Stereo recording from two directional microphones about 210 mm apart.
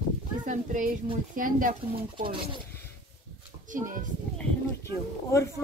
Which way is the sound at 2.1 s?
25° right (ahead or behind).